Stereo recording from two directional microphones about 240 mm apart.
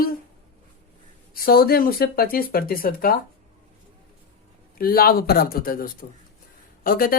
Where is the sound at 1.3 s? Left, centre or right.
Left.